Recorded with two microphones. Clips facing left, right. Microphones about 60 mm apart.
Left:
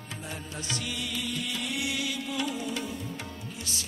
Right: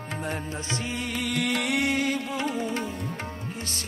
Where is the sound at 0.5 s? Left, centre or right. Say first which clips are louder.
Right 4 dB; right.